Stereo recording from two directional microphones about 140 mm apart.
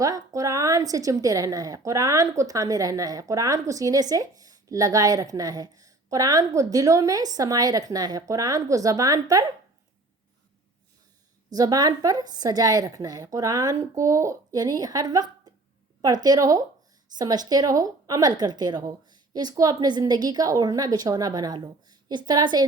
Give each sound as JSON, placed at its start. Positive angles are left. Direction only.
{"t": 0.0, "sound": "a woman's voice", "side_deg": -25}
{"t": 11.4, "sound": "a woman's voice", "side_deg": -25}